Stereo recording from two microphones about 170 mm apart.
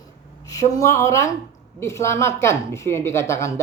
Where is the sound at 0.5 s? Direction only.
20° left (ahead or behind).